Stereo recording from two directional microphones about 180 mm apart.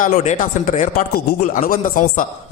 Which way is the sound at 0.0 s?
40° left (ahead or behind).